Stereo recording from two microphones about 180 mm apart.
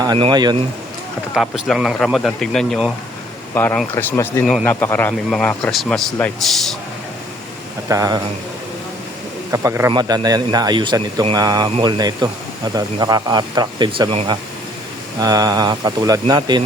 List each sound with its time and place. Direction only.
0.0 s speech: 25° right (ahead or behind)
1.3 s speech: centre (ahead or behind)
3.5 s a man's voice: 10° left (ahead or behind)
7.9 s speech: 20° right (ahead or behind)
9.5 s speech: 15° right (ahead or behind)